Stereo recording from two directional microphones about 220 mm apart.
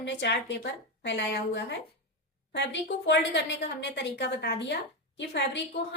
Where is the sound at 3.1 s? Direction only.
55° left (ahead or behind).